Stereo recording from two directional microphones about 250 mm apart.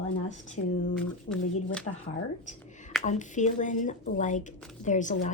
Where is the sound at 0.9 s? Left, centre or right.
Centre.